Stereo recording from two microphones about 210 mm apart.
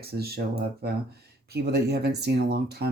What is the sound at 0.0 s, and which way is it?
Speech, 50° right (ahead or behind).